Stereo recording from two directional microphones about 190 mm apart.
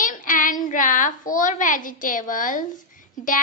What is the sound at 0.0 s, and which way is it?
A child's voice, 45° left (ahead or behind).